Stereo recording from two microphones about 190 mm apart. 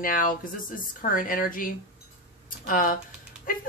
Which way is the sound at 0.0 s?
45° left (ahead or behind).